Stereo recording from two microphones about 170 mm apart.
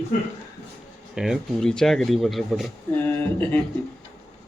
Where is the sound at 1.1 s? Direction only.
Centre (ahead or behind).